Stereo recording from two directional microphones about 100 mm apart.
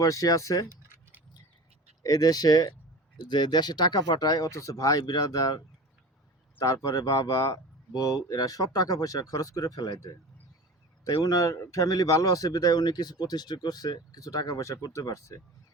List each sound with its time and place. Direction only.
0.0 s speech: 35° left (ahead or behind)
0.7 s keys jangling: 30° right (ahead or behind)
2.0 s speech: 40° left (ahead or behind)
11.2 s speech: 35° left (ahead or behind)